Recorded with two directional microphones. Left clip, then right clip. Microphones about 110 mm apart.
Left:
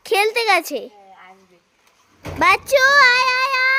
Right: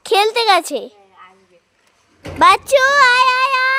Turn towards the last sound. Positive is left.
turn(degrees=-10)  # may be behind; listen again after turning